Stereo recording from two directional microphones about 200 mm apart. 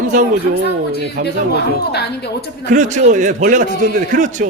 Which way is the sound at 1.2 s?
40° right (ahead or behind).